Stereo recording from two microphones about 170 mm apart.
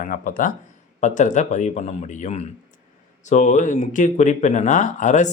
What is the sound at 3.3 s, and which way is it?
Speech, 45° left (ahead or behind).